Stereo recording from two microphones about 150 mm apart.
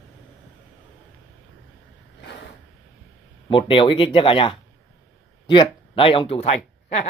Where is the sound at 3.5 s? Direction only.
35° left (ahead or behind).